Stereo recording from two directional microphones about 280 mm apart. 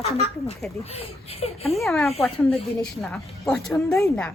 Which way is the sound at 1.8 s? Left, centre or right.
Centre.